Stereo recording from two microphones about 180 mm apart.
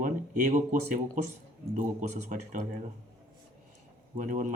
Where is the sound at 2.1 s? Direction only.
45° right (ahead or behind).